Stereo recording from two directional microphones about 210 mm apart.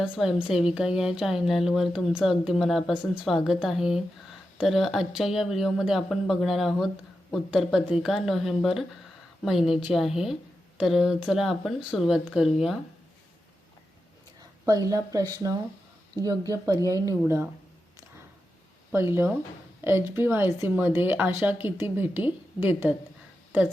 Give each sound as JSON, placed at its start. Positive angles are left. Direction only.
{"t": 0.0, "sound": "speech", "side_deg": -5}
{"t": 14.8, "sound": "speech", "side_deg": -15}
{"t": 19.8, "sound": "speech", "side_deg": -10}